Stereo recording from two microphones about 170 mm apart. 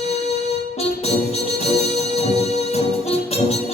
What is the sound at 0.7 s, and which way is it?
Music, 35° left (ahead or behind).